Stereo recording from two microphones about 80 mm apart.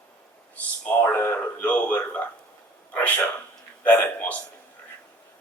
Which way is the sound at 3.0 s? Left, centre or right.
Left.